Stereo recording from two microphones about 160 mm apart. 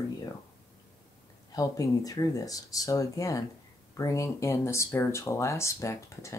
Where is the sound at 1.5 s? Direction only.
20° left (ahead or behind).